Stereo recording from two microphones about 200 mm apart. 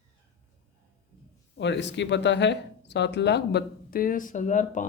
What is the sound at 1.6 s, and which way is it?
Speech, 60° left (ahead or behind).